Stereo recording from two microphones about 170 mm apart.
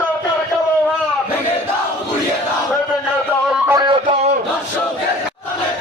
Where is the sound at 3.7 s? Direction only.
25° right (ahead or behind).